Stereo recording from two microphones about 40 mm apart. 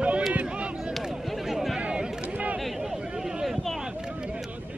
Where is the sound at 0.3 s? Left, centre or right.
Right.